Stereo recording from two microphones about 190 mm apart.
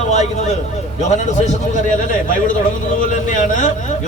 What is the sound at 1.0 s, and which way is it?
A man's voice, 40° left (ahead or behind).